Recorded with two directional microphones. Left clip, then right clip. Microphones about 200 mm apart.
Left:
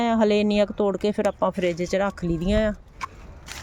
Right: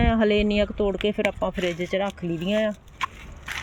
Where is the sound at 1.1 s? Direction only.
15° left (ahead or behind).